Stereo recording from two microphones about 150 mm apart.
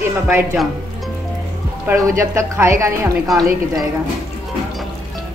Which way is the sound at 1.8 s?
20° right (ahead or behind).